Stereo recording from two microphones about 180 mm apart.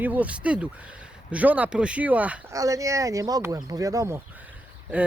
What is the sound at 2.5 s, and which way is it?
Speech, 20° right (ahead or behind).